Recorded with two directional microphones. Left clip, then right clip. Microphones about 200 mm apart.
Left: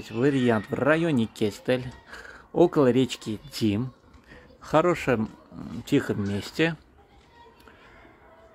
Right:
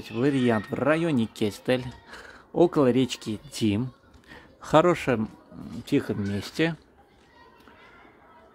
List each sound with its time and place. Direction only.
0.0 s speech: 5° right (ahead or behind)
4.3 s speech: 20° right (ahead or behind)